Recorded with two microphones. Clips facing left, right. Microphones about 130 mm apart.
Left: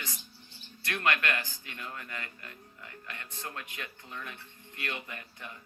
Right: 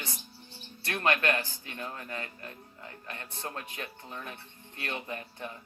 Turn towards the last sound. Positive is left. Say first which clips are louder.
# right 6 dB
turn(degrees=-30)  # may be behind; listen again after turning